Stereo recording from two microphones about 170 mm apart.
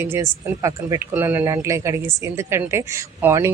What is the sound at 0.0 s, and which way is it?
A woman's voice, 15° right (ahead or behind).